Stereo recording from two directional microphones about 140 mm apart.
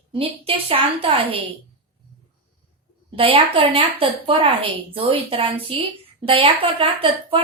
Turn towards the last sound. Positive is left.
turn(degrees=-40)  # may be behind; listen again after turning